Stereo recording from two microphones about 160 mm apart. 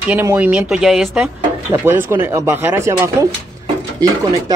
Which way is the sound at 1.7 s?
15° right (ahead or behind).